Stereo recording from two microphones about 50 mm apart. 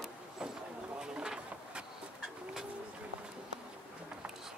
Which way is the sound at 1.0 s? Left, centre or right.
Centre.